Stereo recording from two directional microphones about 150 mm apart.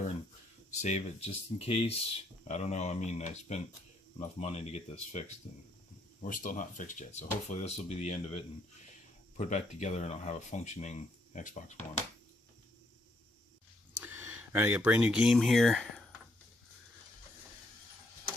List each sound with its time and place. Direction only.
0.7 s speech: 50° left (ahead or behind)
6.2 s speech: 60° left (ahead or behind)
14.0 s speech: 15° right (ahead or behind); by 16.0 s 5° left (ahead or behind)